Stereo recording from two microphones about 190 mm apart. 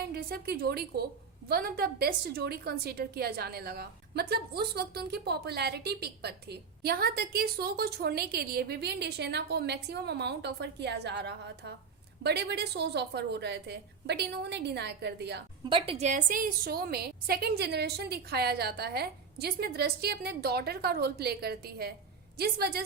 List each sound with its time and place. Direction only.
0.1 s a woman's voice: 55° right (ahead or behind)
15.6 s a woman's voice: 30° right (ahead or behind); by 22.8 s 55° right (ahead or behind)